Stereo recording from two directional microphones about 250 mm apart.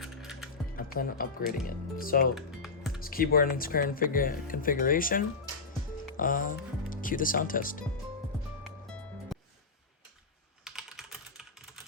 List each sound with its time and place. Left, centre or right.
0.0 s music: centre
0.8 s speech: left
10.6 s typing: centre